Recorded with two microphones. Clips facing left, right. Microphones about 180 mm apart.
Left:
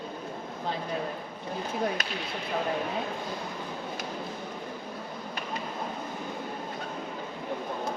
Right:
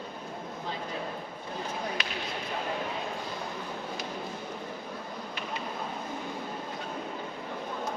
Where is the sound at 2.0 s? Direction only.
45° left (ahead or behind).